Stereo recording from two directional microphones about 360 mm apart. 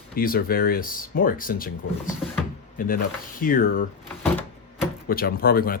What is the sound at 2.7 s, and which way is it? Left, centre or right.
Speech, left.